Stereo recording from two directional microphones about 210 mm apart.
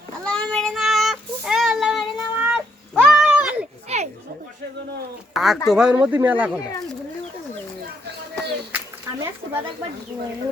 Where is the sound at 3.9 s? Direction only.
30° right (ahead or behind).